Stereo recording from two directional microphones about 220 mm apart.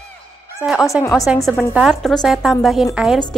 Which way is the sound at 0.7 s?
Centre (ahead or behind).